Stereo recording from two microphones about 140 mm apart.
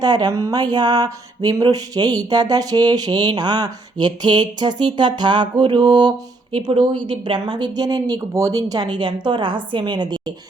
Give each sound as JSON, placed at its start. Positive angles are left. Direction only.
{"t": 0.0, "sound": "a woman's voice", "side_deg": -30}